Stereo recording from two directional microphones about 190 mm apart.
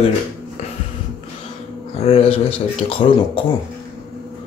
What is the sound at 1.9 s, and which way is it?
A man's voice, 30° left (ahead or behind).